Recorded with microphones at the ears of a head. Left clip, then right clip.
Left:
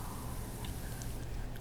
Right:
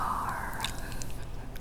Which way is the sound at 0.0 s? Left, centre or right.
Right.